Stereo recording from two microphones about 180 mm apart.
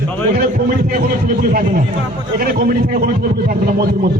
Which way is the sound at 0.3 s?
55° right (ahead or behind).